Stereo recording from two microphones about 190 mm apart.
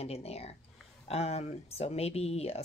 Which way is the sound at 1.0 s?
35° left (ahead or behind).